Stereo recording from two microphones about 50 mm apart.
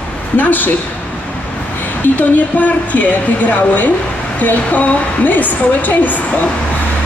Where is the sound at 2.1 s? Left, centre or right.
Left.